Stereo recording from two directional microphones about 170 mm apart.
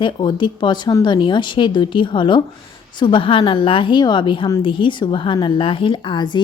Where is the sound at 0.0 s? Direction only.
30° left (ahead or behind).